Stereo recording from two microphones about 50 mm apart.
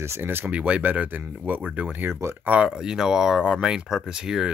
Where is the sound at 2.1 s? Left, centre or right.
Right.